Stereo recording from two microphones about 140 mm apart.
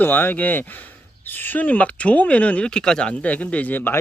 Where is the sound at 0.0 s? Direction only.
15° left (ahead or behind).